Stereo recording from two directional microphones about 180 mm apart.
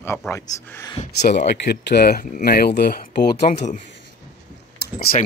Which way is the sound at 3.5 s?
40° left (ahead or behind).